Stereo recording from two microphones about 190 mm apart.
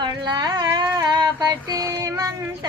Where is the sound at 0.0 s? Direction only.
20° right (ahead or behind).